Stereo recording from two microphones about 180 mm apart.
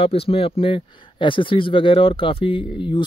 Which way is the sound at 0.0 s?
30° left (ahead or behind).